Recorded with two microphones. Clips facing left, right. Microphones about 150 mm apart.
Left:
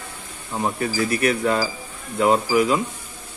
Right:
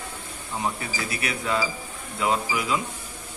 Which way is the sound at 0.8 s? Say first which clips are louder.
Left 10 dB; 50° left (ahead or behind).